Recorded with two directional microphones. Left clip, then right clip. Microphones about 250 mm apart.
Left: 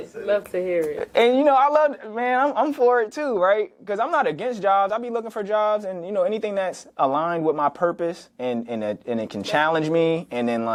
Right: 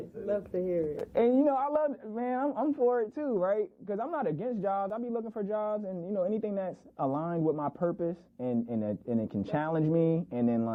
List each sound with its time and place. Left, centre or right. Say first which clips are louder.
0.3 s speech: left 9 dB; centre